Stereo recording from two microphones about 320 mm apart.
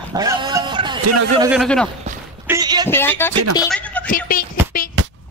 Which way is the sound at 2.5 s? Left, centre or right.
Centre.